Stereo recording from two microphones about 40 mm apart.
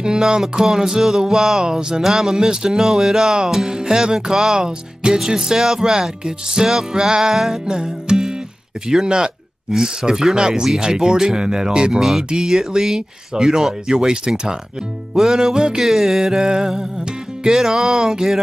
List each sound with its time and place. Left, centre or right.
0.0 s music: centre
10.8 s speech: centre
12.0 s music: centre
13.8 s speech: centre
15.1 s music: centre
15.8 s music: centre